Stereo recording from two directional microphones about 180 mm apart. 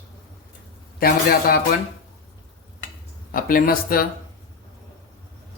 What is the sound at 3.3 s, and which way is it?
Speech, 50° left (ahead or behind).